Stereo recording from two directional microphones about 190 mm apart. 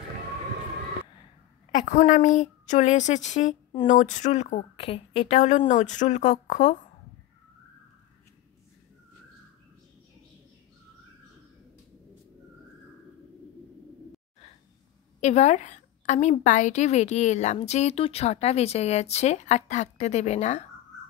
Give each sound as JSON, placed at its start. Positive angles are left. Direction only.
{"t": 1.7, "sound": "a woman's voice", "side_deg": 45}
{"t": 15.1, "sound": "a woman's voice", "side_deg": 35}